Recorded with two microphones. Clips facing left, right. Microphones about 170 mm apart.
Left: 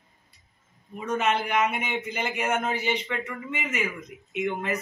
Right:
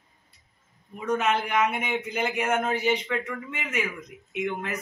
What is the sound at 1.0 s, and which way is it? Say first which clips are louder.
A man's voice: right 1 dB; centre (ahead or behind).